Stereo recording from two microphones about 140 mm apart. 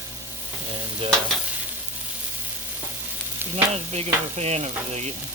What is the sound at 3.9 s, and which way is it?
Stir, 50° right (ahead or behind).